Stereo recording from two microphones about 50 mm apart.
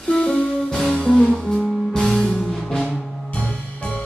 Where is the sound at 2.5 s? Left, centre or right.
Centre.